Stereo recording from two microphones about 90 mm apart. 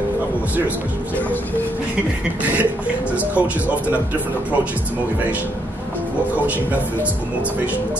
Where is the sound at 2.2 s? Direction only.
15° right (ahead or behind).